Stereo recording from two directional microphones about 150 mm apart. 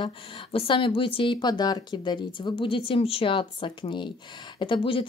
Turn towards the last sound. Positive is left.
turn(degrees=35)  # may be behind; listen again after turning